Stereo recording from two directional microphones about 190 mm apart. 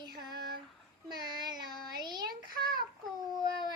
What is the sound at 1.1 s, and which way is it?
Child singing, 20° right (ahead or behind).